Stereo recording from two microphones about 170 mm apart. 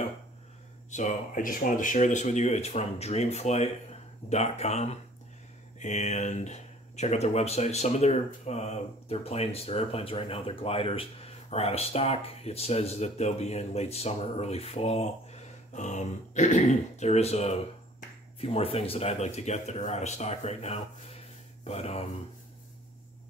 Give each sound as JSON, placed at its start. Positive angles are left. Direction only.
{"t": 0.8, "sound": "speech", "side_deg": 45}